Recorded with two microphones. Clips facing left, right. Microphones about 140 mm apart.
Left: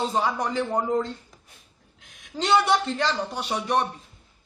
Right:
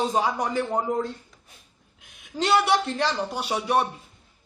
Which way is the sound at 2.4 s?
Centre (ahead or behind).